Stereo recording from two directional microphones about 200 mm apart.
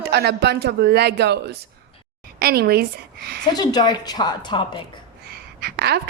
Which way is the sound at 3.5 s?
20° left (ahead or behind).